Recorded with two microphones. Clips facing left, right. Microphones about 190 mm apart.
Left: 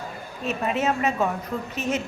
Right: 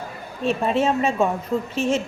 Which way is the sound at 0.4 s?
30° right (ahead or behind).